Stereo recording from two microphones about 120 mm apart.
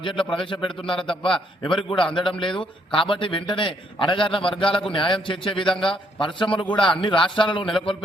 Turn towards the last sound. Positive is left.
turn(degrees=45)  # may be behind; listen again after turning